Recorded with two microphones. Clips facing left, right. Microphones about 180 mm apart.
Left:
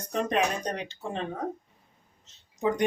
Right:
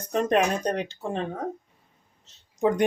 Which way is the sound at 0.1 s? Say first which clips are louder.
Right 4 dB; 55° right (ahead or behind).